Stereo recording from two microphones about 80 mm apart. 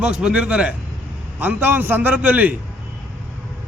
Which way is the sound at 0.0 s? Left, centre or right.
Centre.